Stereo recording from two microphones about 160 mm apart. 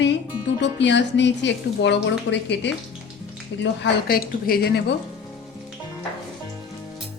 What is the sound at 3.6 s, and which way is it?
A woman's voice, 75° left (ahead or behind).